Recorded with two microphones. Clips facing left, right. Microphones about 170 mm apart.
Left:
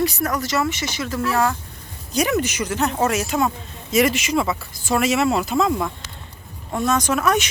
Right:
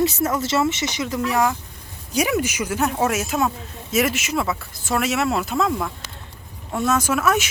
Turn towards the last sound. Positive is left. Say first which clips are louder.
# left 1 dB
turn(degrees=-5)  # may be behind; listen again after turning